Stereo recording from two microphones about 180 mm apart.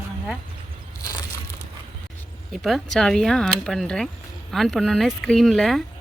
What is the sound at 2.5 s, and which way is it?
Speech, centre (ahead or behind).